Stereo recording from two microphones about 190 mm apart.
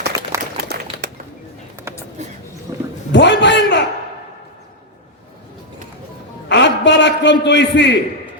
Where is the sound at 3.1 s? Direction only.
65° left (ahead or behind).